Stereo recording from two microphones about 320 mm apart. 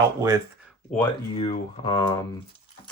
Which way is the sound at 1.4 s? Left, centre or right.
Centre.